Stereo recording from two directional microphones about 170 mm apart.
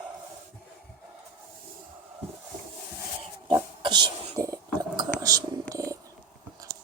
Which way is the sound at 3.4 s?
30° right (ahead or behind).